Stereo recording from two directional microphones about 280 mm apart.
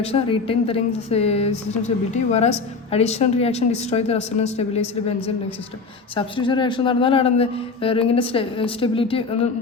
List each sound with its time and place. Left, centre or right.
0.0 s speech: left